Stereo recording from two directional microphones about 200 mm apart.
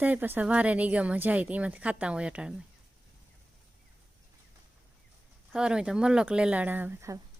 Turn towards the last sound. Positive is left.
turn(degrees=-10)  # may be behind; listen again after turning